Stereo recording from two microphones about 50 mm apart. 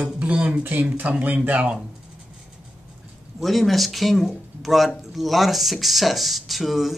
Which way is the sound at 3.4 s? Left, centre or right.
Centre.